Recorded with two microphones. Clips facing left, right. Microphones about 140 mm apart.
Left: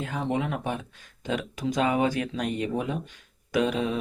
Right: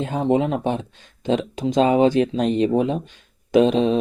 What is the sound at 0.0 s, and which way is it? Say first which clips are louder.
Speech: right 9 dB; 25° right (ahead or behind).